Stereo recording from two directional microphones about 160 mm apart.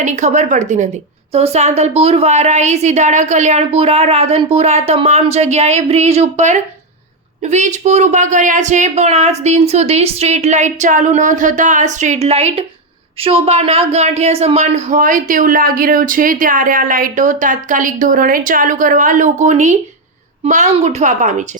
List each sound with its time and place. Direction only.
0.0 s a woman's voice: 45° right (ahead or behind)